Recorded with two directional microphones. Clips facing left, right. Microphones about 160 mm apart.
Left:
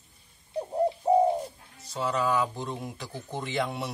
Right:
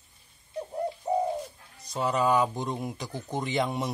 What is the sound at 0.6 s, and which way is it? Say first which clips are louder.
Bird: left 5 dB; 30° left (ahead or behind).